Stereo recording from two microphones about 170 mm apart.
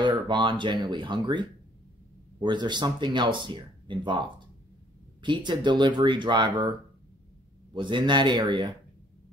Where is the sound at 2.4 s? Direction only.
25° right (ahead or behind).